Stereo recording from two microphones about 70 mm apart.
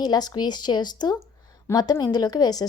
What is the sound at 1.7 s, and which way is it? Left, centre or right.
Speech, left.